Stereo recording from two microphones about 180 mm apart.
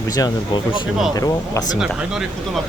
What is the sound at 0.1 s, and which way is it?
Speech, 20° left (ahead or behind).